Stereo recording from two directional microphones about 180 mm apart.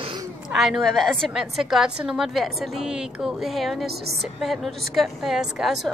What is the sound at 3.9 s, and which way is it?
Speech, 60° right (ahead or behind).